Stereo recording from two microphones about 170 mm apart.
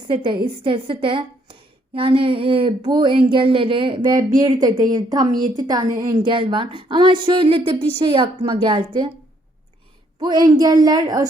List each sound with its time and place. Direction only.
0.1 s a woman's voice: 30° right (ahead or behind)
10.2 s a woman's voice: 25° right (ahead or behind)